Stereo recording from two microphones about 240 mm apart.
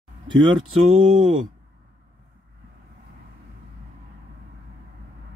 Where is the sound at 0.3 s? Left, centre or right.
Centre.